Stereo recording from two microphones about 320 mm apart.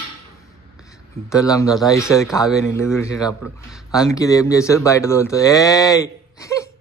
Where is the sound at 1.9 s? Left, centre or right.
Centre.